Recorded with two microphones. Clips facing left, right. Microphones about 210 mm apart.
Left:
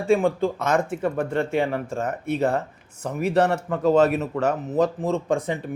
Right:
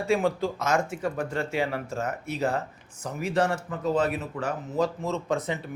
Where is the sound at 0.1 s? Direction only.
50° left (ahead or behind); by 4.5 s 70° left (ahead or behind).